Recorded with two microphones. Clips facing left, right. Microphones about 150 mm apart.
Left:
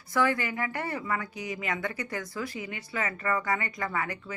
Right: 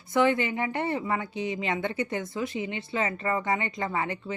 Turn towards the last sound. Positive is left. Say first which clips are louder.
# right 3 dB
turn(degrees=-25)  # may be behind; listen again after turning